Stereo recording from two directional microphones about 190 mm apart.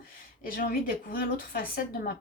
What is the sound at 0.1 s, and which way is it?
Speech, 50° left (ahead or behind).